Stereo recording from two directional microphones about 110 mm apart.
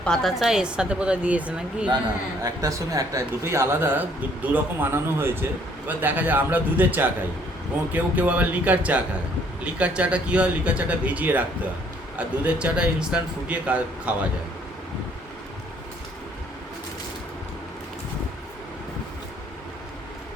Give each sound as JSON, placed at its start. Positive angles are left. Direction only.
{"t": 0.0, "sound": "a man's voice", "side_deg": 5}
{"t": 2.4, "sound": "a man's voice", "side_deg": -30}